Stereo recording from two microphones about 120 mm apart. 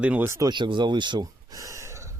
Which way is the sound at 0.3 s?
25° right (ahead or behind).